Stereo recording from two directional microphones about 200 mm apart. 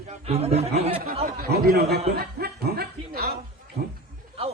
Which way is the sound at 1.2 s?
50° right (ahead or behind).